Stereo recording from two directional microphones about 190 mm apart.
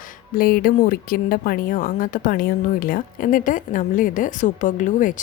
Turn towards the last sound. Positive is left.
turn(degrees=40)  # may be behind; listen again after turning